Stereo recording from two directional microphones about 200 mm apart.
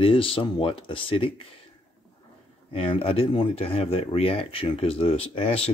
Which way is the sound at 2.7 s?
25° left (ahead or behind).